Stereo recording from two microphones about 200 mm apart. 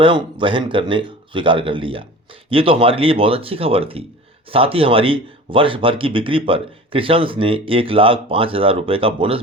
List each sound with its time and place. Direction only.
0.0 s a man's voice: 25° right (ahead or behind)